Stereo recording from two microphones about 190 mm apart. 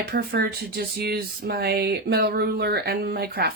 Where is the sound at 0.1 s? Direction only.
55° right (ahead or behind).